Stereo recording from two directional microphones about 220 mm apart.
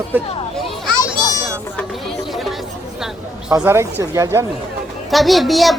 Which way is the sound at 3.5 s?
10° right (ahead or behind).